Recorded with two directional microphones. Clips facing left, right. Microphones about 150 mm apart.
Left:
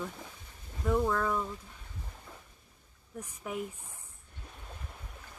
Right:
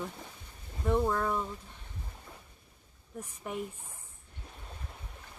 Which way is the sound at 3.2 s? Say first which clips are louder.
Even; centre (ahead or behind).